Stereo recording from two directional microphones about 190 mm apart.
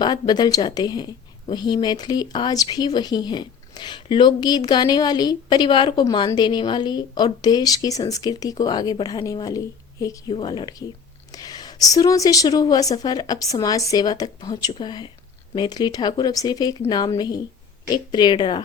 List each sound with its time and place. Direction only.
0.0 s a woman's voice: 20° left (ahead or behind)